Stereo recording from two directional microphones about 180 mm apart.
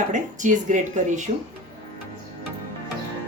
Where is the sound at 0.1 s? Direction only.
45° right (ahead or behind).